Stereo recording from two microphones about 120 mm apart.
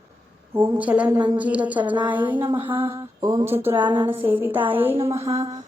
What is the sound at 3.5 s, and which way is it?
Speech, 20° right (ahead or behind).